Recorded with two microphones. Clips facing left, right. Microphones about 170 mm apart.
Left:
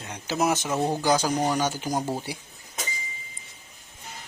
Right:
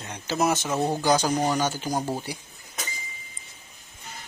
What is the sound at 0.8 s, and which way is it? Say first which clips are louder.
Speech: even; 5° right (ahead or behind).